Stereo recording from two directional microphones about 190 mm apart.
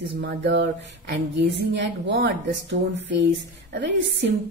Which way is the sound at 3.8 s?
65° right (ahead or behind).